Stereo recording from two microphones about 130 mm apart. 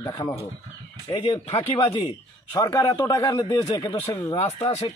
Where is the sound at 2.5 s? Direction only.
25° left (ahead or behind).